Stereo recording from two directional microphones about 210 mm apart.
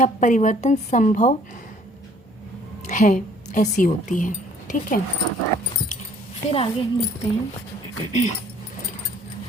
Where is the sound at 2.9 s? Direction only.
35° left (ahead or behind).